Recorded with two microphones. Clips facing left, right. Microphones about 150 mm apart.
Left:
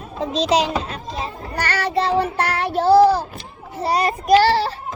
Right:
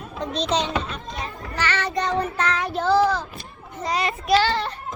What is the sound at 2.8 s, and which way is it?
A child's voice, 35° left (ahead or behind).